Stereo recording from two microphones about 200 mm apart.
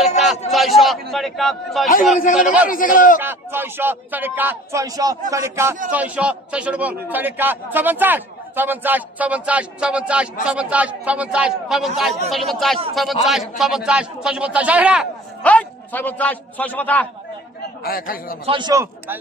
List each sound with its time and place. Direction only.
0.5 s a sound: centre (ahead or behind)
1.1 s a man's voice: centre (ahead or behind)
2.7 s a man's voice: 45° left (ahead or behind)
3.2 s a man's voice: 10° right (ahead or behind)
15.4 s a man's voice: 5° left (ahead or behind)
17.8 s a man's voice: 45° left (ahead or behind)
18.4 s a man's voice: 25° right (ahead or behind)